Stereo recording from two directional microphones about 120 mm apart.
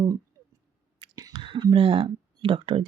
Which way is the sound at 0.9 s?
45° right (ahead or behind).